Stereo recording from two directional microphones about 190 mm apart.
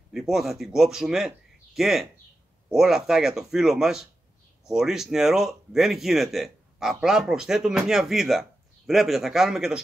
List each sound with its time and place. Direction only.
0.1 s speech: centre (ahead or behind)